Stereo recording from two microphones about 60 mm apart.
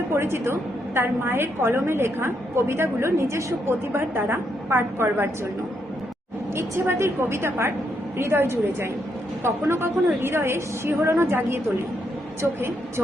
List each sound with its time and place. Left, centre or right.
0.1 s a woman's voice: right
6.6 s a woman's voice: right